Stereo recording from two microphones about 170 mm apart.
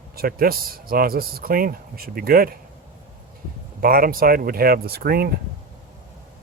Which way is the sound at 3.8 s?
60° right (ahead or behind).